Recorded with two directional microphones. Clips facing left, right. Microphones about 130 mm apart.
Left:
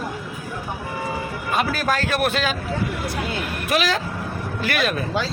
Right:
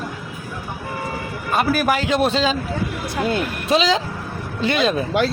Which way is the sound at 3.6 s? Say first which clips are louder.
Right 4 dB; 25° right (ahead or behind).